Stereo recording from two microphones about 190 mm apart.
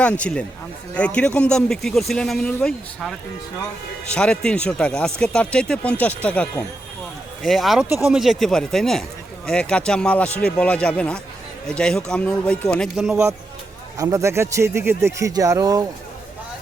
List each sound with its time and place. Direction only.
0.0 s speech: 5° left (ahead or behind)
13.9 s a man's voice: 15° right (ahead or behind)